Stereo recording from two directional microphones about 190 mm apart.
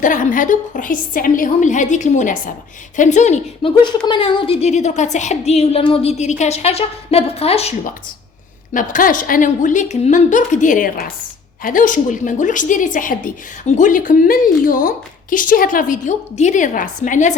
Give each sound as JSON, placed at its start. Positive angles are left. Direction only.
{"t": 0.0, "sound": "a woman's voice", "side_deg": 45}
{"t": 4.0, "sound": "a woman's voice", "side_deg": 25}
{"t": 8.7, "sound": "a woman's voice", "side_deg": 45}